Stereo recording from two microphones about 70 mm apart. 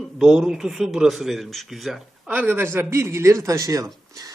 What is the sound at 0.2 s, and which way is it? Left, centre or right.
Speech, centre.